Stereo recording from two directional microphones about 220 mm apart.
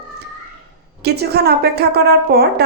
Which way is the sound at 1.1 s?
45° right (ahead or behind).